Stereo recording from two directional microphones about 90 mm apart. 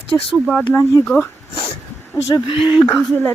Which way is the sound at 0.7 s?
35° left (ahead or behind).